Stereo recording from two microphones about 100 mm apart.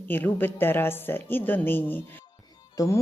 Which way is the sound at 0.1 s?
20° left (ahead or behind).